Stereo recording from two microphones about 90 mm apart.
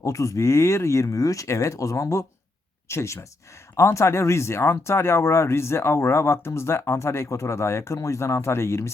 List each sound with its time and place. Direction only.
0.0 s speech: 35° left (ahead or behind)